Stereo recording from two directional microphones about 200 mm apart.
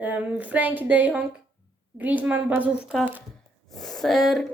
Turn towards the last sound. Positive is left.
turn(degrees=0)  # may be behind; listen again after turning